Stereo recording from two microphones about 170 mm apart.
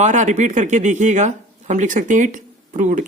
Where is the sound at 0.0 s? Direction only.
45° right (ahead or behind).